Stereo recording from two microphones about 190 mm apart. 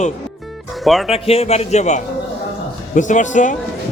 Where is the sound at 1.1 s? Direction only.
30° left (ahead or behind).